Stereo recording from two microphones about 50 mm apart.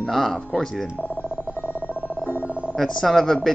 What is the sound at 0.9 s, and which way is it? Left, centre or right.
Telephone dialing, left.